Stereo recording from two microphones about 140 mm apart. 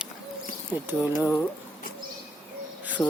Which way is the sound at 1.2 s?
20° left (ahead or behind).